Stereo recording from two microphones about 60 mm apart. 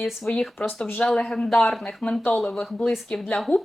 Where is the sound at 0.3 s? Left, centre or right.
Left.